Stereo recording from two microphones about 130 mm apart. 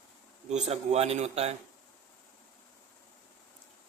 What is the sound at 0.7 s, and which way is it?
Speech, 55° right (ahead or behind).